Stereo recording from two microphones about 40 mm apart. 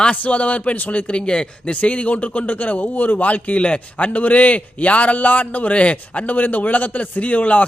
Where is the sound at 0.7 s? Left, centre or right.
Left.